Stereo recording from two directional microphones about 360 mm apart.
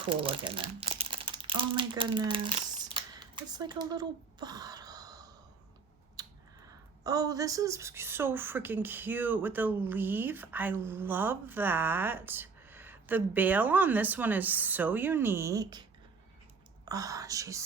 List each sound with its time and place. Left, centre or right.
0.0 s crumpling: centre
6.2 s a sound: centre
7.0 s speech: centre